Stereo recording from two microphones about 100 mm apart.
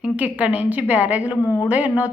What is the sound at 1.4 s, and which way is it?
Speech, 30° left (ahead or behind).